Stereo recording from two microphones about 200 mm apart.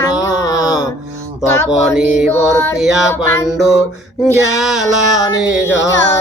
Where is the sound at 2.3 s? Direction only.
15° left (ahead or behind).